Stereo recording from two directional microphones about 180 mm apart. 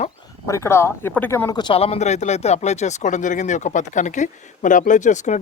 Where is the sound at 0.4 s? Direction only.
15° left (ahead or behind).